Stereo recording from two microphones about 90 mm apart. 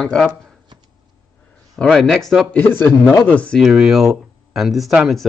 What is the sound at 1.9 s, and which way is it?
Speech, centre (ahead or behind).